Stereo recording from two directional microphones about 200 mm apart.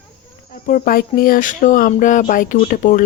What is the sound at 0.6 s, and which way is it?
A woman's voice, 45° left (ahead or behind).